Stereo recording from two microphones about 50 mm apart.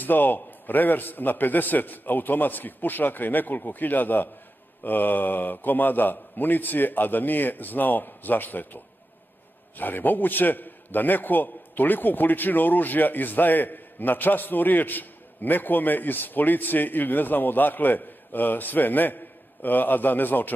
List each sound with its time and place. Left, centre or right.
0.0 s a man's voice: left